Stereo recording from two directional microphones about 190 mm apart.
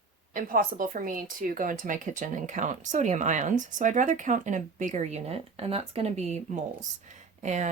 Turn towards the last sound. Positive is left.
turn(degrees=-40)  # may be behind; listen again after turning